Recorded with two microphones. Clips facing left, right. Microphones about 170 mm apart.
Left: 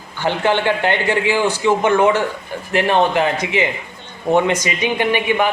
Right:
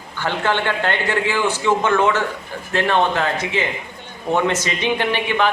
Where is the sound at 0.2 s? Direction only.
15° left (ahead or behind).